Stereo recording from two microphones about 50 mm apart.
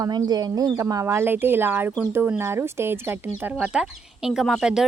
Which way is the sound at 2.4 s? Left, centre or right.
Right.